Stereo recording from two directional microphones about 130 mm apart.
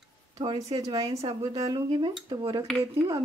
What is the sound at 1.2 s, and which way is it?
Speech, 45° right (ahead or behind).